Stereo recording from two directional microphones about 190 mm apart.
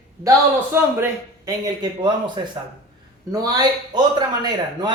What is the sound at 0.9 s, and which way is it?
Speech, 15° right (ahead or behind).